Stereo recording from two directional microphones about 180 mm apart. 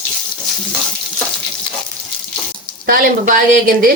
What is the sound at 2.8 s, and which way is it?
A woman's voice, 50° right (ahead or behind).